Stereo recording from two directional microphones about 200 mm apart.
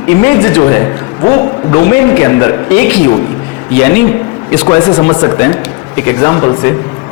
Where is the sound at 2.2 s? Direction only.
10° left (ahead or behind).